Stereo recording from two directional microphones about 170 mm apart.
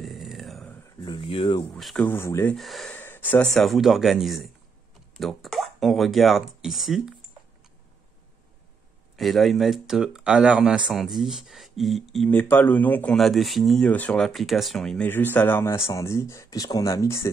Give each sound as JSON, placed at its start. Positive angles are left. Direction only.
{"t": 0.0, "sound": "a sound", "side_deg": 0}
{"t": 1.0, "sound": "speech", "side_deg": 30}
{"t": 1.7, "sound": "speech", "side_deg": 0}
{"t": 2.0, "sound": "speech", "side_deg": 15}
{"t": 2.5, "sound": "speech", "side_deg": 0}
{"t": 9.1, "sound": "speech", "side_deg": 0}